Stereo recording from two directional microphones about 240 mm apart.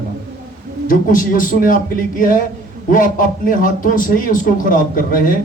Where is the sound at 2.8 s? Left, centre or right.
Left.